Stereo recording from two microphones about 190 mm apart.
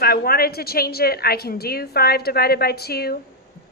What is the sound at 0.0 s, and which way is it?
A woman's voice, 55° left (ahead or behind).